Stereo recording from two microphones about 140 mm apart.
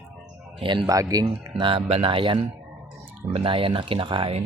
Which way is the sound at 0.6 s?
35° right (ahead or behind).